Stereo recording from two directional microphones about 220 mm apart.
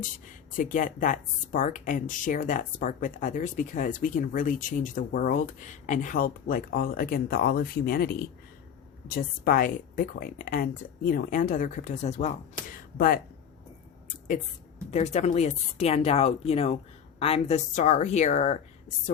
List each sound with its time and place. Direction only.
0.0 s speech: 35° left (ahead or behind)
14.8 s speech: 30° left (ahead or behind)